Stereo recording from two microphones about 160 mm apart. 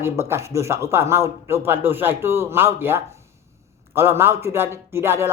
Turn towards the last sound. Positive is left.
turn(degrees=-15)  # may be behind; listen again after turning